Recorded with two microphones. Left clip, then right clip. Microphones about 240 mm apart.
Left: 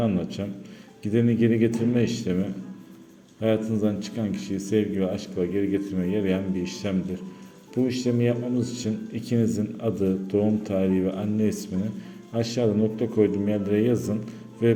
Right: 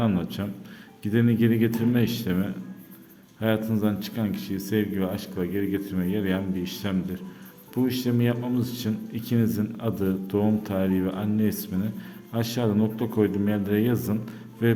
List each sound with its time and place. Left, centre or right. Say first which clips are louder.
0.0 s speech: left 1 dB; centre